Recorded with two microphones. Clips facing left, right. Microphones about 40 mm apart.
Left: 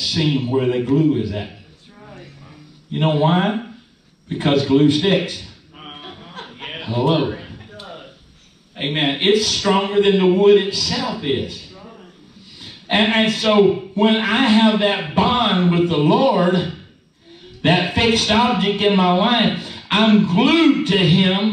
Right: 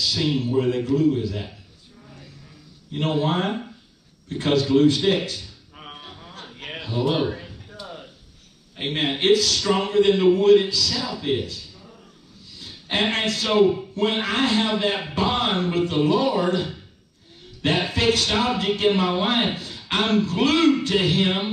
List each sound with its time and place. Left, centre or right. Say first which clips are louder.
0.0 s speech: left 3 dB; left
2.9 s a man's voice: left 6 dB; left
4.3 s a sound: left 4 dB; left
8.7 s a man's voice: left 4 dB; left